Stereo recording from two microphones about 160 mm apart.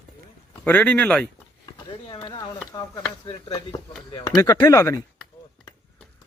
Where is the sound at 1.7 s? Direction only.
30° left (ahead or behind).